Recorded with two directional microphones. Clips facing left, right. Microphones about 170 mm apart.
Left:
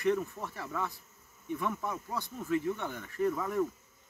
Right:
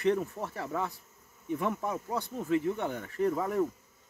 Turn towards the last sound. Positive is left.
turn(degrees=-25)  # may be behind; listen again after turning